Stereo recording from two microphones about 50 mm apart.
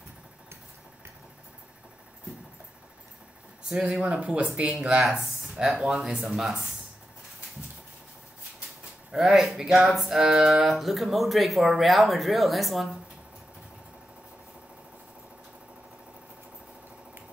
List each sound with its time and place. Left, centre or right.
3.6 s speech: right
4.7 s speech: centre
9.1 s speech: centre